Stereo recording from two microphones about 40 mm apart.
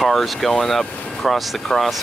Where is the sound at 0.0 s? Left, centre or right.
Centre.